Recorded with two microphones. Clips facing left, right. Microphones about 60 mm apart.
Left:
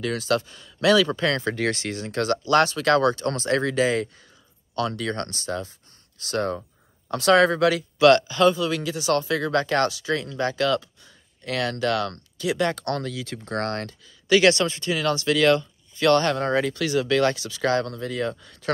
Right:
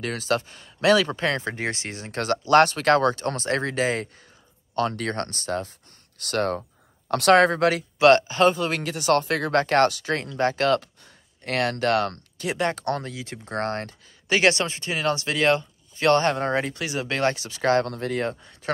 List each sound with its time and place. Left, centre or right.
0.0 s speech: right
7.3 s speech: right